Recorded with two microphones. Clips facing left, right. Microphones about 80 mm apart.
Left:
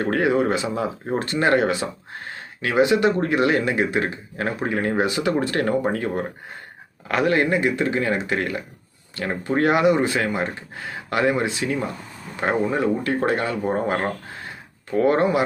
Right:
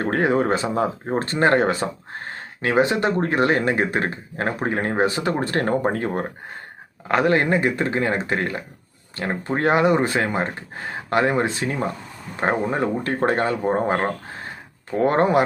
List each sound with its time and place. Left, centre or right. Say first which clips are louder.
0.0 s speech: even; right